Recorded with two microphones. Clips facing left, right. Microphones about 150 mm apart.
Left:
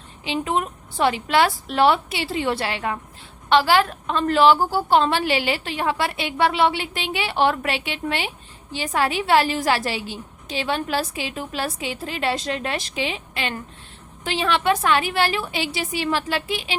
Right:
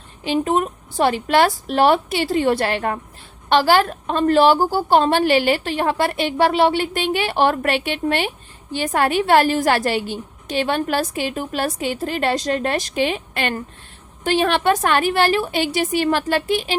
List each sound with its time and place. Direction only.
0.3 s a woman's voice: 45° right (ahead or behind)